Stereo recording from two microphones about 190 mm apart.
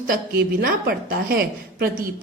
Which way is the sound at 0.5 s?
55° right (ahead or behind).